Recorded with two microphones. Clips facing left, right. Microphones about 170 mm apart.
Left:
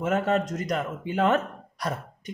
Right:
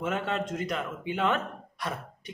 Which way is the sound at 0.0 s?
40° left (ahead or behind).